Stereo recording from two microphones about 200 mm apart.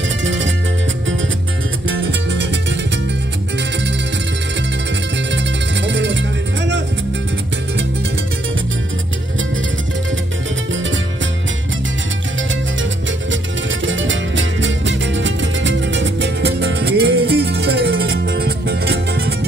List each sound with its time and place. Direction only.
1.9 s music: 75° right (ahead or behind)
5.3 s music: 65° right (ahead or behind)
13.8 s music: 70° right (ahead or behind); by 19.3 s 55° right (ahead or behind)